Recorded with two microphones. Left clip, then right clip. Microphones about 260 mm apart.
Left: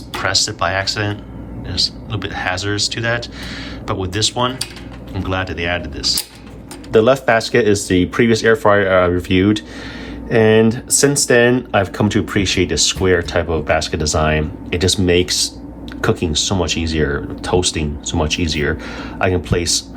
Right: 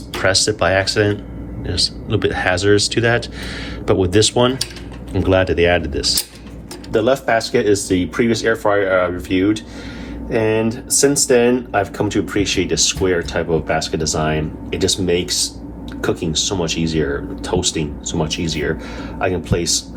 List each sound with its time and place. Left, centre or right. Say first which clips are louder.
0.1 s speech: right 2 dB; centre
6.9 s speech: left 3 dB; left